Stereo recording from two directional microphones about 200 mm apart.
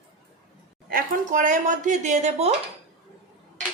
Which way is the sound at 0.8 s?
45° right (ahead or behind).